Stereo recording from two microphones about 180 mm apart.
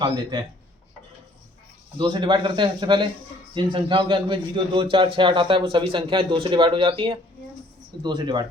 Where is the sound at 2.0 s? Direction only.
25° right (ahead or behind).